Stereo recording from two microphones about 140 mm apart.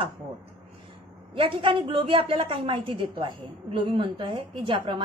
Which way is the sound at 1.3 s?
40° right (ahead or behind).